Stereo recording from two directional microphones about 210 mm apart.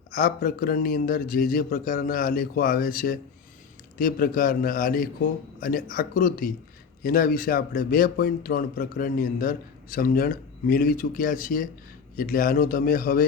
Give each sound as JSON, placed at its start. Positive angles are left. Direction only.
{"t": 0.1, "sound": "speech", "side_deg": 45}